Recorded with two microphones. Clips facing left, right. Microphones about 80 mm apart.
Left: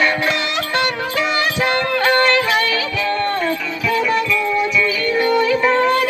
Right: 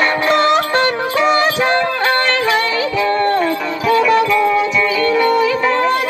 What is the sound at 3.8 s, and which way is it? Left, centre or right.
Music, right.